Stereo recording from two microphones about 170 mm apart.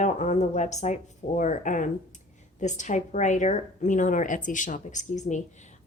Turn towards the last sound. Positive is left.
turn(degrees=45)  # may be behind; listen again after turning